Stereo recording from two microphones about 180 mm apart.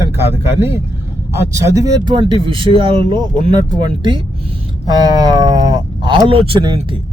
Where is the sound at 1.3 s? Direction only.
15° right (ahead or behind).